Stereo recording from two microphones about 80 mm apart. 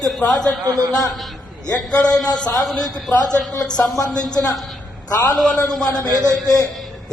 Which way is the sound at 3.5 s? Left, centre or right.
Left.